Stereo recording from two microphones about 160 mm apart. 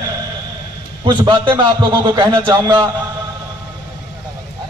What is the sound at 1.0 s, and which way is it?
A man's voice, 30° right (ahead or behind).